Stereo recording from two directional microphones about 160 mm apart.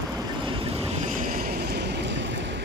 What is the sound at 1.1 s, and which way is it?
Vehicle, 55° right (ahead or behind).